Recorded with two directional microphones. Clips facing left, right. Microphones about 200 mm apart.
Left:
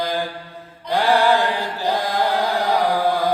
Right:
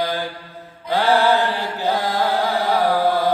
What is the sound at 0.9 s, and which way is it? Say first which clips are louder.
Mantra: even; 15° left (ahead or behind).